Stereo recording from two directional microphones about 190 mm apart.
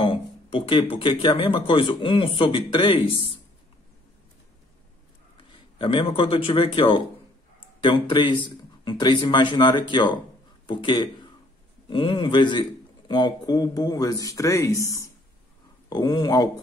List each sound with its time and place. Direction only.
0.0 s speech: 30° left (ahead or behind)
5.8 s speech: 25° left (ahead or behind)